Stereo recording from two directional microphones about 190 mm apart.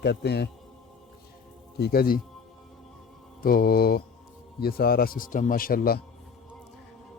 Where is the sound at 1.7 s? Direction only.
55° left (ahead or behind).